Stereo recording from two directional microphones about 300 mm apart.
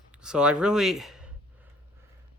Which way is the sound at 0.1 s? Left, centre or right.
Centre.